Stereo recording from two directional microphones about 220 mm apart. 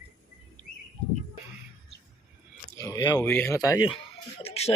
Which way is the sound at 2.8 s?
20° left (ahead or behind).